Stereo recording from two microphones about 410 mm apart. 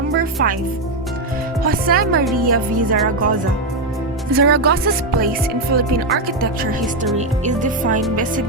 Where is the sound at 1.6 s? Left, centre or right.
Right.